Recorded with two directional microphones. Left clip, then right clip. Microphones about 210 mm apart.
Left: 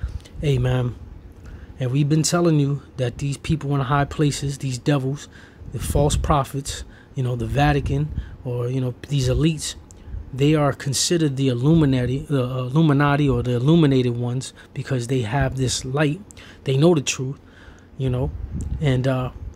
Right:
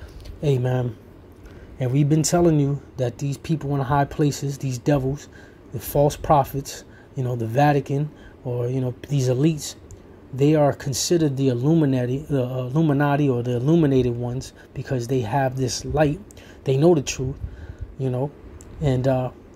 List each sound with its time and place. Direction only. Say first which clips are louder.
0.4 s speech: right 1 dB; 15° left (ahead or behind)